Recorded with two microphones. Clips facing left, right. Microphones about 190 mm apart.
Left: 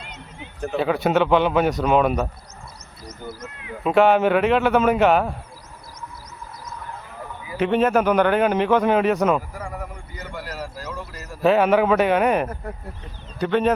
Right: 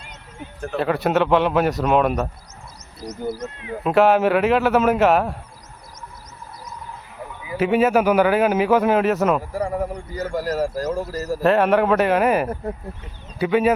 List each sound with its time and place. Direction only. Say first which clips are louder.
0.6 s speech: even; centre (ahead or behind)
3.8 s speech: even; centre (ahead or behind)
7.5 s speech: right 1 dB; 5° right (ahead or behind)
9.4 s speech: right 9 dB; 30° right (ahead or behind)
9.9 s speech: right 10 dB; 40° right (ahead or behind)
11.4 s speech: even; centre (ahead or behind)